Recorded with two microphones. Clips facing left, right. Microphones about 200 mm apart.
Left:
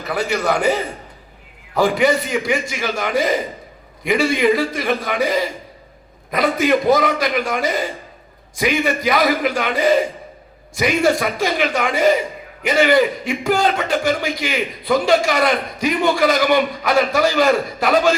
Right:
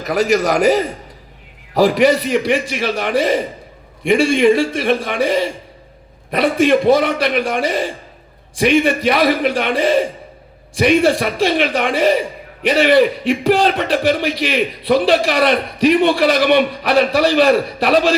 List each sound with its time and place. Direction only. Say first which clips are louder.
0.1 s a man's voice: right 5 dB; 40° right (ahead or behind)